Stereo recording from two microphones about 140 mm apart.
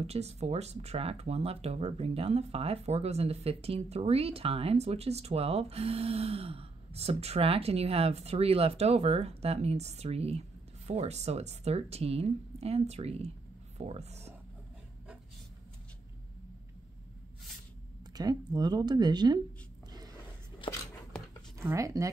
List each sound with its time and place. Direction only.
0.0 s speech: 50° right (ahead or behind)
18.1 s speech: 30° right (ahead or behind)
20.6 s a sound: 40° left (ahead or behind)
21.5 s speech: 20° right (ahead or behind)